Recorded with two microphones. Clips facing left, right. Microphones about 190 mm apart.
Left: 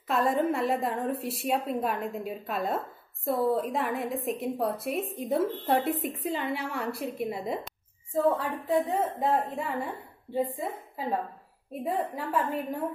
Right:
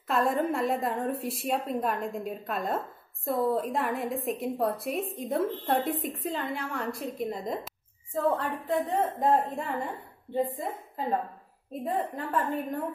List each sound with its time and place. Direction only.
0.1 s a woman's voice: centre (ahead or behind)